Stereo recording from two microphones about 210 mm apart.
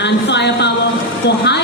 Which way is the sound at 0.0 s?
55° left (ahead or behind).